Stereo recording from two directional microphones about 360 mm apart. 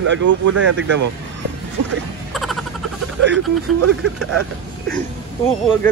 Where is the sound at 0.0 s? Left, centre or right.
Right.